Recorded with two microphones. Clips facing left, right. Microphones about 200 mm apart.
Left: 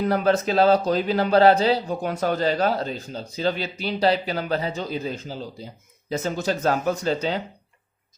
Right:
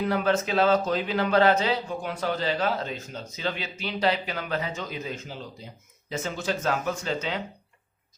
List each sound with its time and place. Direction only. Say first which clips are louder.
0.0 s speech: left 4 dB; 40° left (ahead or behind)